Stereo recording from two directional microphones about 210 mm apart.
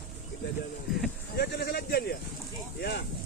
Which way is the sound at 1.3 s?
50° left (ahead or behind).